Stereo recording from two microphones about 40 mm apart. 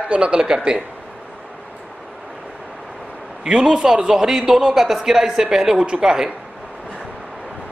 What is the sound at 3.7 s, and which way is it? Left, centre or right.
Speech, centre.